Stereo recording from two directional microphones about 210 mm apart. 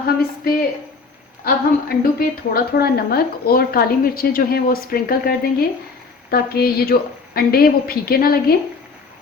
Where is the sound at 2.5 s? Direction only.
45° left (ahead or behind).